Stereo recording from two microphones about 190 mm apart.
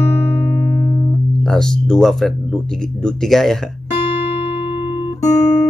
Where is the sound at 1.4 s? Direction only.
5° left (ahead or behind).